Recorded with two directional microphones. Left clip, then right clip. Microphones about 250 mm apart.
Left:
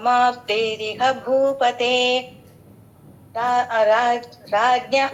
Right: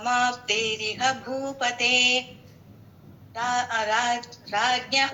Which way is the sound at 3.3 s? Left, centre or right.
Centre.